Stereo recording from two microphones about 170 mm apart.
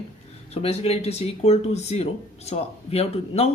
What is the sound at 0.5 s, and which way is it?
Speech, 35° left (ahead or behind).